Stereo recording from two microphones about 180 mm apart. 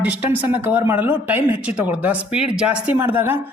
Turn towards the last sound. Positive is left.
turn(degrees=-10)  # may be behind; listen again after turning